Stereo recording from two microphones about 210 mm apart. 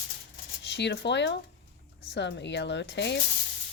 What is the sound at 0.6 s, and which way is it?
Speech, 55° left (ahead or behind).